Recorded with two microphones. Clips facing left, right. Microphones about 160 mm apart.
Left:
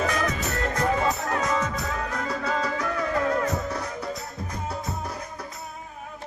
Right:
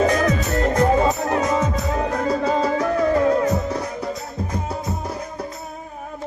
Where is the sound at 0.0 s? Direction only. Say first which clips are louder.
Right 8 dB; 35° right (ahead or behind).